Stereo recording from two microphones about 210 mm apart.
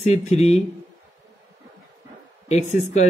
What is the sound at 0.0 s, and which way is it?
Speech, 30° left (ahead or behind).